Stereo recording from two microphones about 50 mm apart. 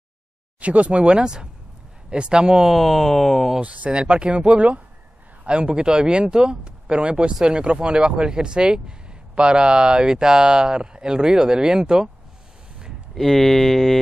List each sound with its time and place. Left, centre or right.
0.6 s speech: right; by 3.5 s centre
3.5 s speech: right
13.1 s speech: centre